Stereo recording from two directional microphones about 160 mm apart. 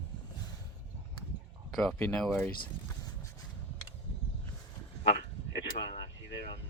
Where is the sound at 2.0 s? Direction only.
5° left (ahead or behind).